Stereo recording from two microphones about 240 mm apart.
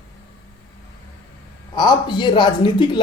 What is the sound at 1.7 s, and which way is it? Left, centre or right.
Speech, centre.